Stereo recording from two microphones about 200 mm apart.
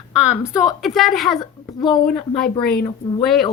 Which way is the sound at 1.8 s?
20° left (ahead or behind).